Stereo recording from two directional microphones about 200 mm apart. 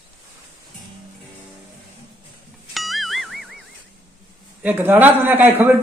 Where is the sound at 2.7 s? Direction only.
Centre (ahead or behind).